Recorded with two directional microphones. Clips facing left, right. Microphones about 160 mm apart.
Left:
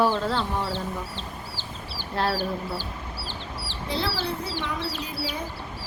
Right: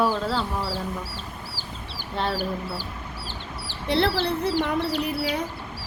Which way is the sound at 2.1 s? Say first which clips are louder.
Left 1 dB; centre (ahead or behind).